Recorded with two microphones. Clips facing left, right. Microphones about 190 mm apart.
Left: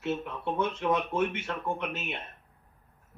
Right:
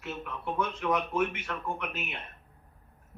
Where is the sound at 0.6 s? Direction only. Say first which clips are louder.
Left 1 dB; 25° left (ahead or behind).